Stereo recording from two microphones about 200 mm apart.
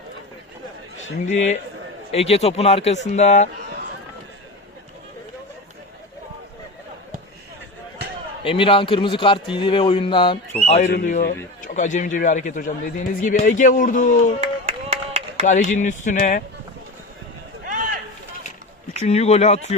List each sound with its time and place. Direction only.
1.3 s a man's voice: 35° left (ahead or behind)
8.4 s a man's voice: 25° left (ahead or behind)
14.4 s clapping: 30° right (ahead or behind)
15.4 s a man's voice: 35° left (ahead or behind)
17.7 s run: 40° right (ahead or behind)
19.0 s a man's voice: 35° left (ahead or behind)